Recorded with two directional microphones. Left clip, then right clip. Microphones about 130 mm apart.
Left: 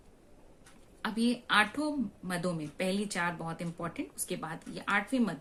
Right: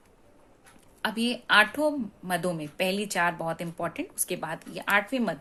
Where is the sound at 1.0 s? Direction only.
50° right (ahead or behind).